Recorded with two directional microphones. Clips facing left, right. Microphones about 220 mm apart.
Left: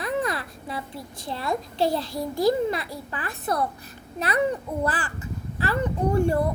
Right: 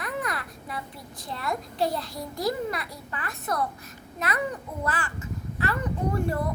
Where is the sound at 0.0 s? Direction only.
30° left (ahead or behind).